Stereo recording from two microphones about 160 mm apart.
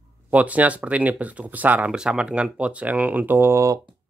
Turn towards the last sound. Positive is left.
turn(degrees=-15)  # may be behind; listen again after turning